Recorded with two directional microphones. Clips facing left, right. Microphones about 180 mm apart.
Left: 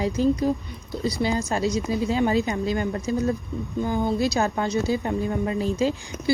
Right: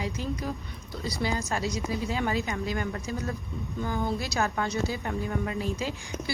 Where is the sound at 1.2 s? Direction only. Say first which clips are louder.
Left 5 dB; 25° left (ahead or behind).